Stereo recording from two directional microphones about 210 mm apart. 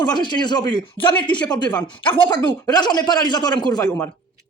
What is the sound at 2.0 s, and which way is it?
Speech, 5° left (ahead or behind).